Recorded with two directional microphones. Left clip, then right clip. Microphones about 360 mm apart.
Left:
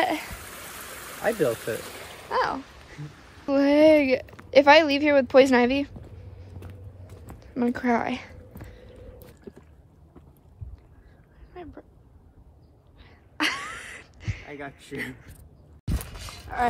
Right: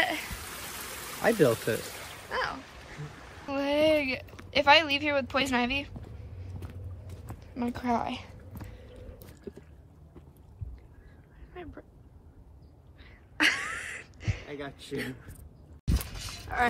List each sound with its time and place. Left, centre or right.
0.5 s stream: centre
1.2 s speech: centre
2.0 s a sound: left
2.3 s dog: centre
3.4 s speech: centre
7.3 s speech: centre
9.5 s rowboat: centre
11.5 s vehicle: centre
13.0 s a sound: centre
16.5 s speech: centre